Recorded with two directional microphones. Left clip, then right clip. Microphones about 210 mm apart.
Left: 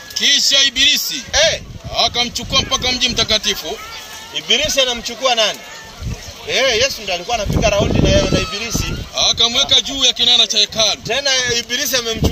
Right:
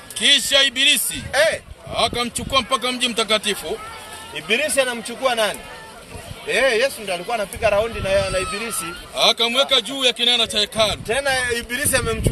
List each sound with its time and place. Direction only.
0.2 s speech: 20° right (ahead or behind)
1.3 s a man's voice: 5° left (ahead or behind)
2.0 s speech: 20° right (ahead or behind)
4.4 s speech: 5° left (ahead or behind)
9.1 s a man's voice: 15° right (ahead or behind)
11.1 s a man's voice: 5° left (ahead or behind)